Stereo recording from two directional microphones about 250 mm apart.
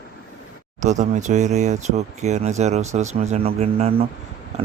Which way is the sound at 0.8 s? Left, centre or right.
Right.